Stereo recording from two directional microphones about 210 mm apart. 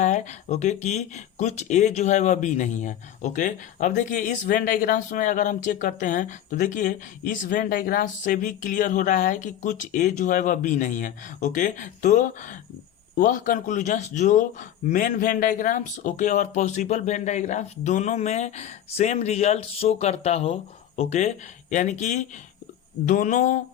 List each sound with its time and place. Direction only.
0.0 s speech: 35° left (ahead or behind)